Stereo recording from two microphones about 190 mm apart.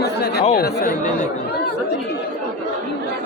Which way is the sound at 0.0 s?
60° left (ahead or behind).